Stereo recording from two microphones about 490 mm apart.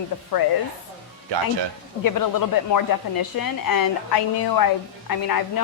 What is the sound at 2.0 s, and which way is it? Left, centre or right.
Speech, left.